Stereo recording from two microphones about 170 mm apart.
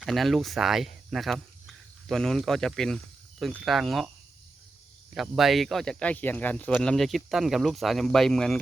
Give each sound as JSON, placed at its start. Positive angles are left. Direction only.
{"t": 0.0, "sound": "speech", "side_deg": 0}
{"t": 5.1, "sound": "speech", "side_deg": 0}